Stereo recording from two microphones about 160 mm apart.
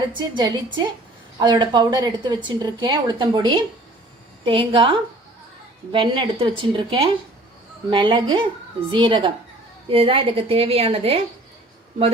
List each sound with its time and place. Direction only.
0.2 s a woman's voice: 30° right (ahead or behind)